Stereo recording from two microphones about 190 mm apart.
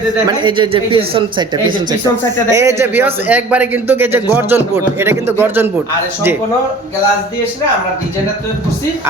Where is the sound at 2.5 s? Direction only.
15° right (ahead or behind).